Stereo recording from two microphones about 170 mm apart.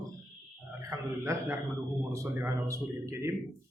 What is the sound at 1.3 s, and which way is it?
A man's voice, 15° right (ahead or behind).